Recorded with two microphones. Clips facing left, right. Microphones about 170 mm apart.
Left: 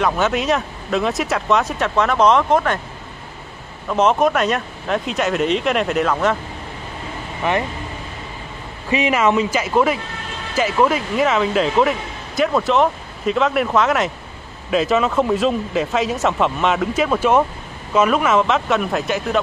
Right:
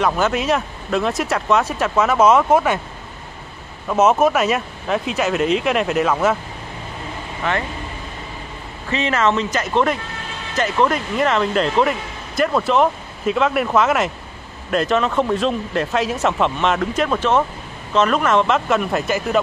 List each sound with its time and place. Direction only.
0.0 s speech: centre (ahead or behind)
3.9 s speech: 5° right (ahead or behind)
7.4 s speech: 15° left (ahead or behind)
8.9 s speech: 10° left (ahead or behind)